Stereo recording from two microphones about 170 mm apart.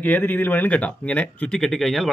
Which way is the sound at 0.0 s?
10° left (ahead or behind).